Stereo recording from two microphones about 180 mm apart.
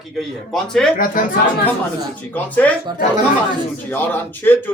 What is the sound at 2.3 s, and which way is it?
Speech, 10° left (ahead or behind).